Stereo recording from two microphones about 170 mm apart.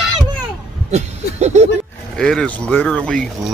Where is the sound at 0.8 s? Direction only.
40° right (ahead or behind).